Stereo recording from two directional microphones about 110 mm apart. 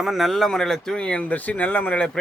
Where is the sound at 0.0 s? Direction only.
Centre (ahead or behind).